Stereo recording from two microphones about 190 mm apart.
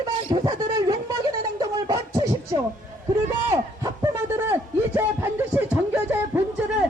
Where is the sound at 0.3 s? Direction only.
20° right (ahead or behind).